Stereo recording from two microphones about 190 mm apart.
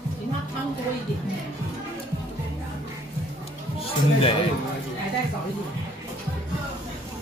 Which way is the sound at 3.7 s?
30° left (ahead or behind).